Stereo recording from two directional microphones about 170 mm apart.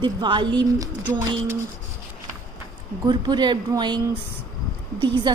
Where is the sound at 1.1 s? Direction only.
15° right (ahead or behind).